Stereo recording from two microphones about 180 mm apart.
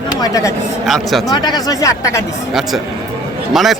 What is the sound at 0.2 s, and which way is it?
Speech, 20° left (ahead or behind).